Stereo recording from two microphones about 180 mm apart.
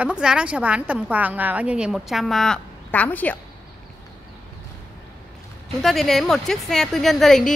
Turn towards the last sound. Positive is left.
turn(degrees=0)  # may be behind; listen again after turning